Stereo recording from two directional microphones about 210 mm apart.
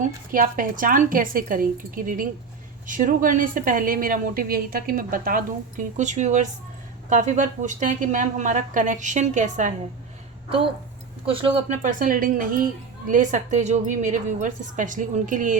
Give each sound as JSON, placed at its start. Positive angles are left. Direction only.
{"t": 0.0, "sound": "speech", "side_deg": -40}
{"t": 11.3, "sound": "speech", "side_deg": -25}